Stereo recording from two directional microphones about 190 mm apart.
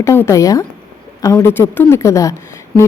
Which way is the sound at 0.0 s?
15° left (ahead or behind).